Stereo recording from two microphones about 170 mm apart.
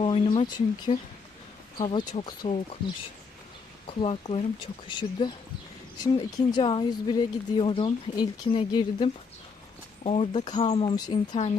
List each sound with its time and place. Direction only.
0.0 s speech: 30° left (ahead or behind)
3.8 s speech: 35° left (ahead or behind)